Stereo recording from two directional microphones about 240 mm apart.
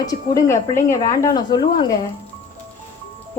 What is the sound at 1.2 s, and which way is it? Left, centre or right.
Speech, centre.